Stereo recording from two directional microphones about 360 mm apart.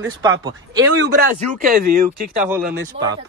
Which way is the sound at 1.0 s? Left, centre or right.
Right.